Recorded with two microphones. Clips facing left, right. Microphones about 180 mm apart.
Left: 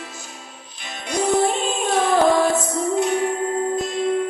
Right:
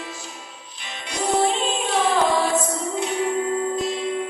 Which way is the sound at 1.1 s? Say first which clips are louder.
Left 2 dB; 45° left (ahead or behind).